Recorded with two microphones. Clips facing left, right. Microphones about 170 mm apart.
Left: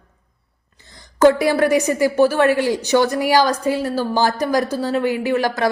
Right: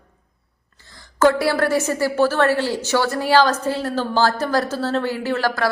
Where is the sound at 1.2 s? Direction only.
15° left (ahead or behind).